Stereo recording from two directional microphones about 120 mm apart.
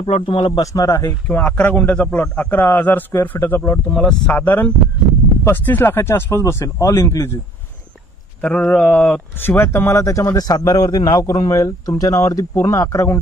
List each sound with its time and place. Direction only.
0.0 s speech: 45° left (ahead or behind)
0.6 s speech: 25° left (ahead or behind)
1.2 s a man's voice: 10° left (ahead or behind)
8.4 s speech: 10° left (ahead or behind)